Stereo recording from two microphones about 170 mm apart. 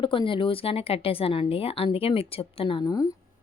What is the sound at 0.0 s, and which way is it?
Speech, 30° left (ahead or behind).